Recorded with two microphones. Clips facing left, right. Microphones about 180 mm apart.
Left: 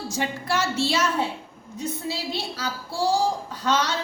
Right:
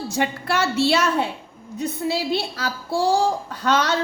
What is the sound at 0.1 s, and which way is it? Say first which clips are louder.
A woman's voice: right 3 dB; 65° right (ahead or behind).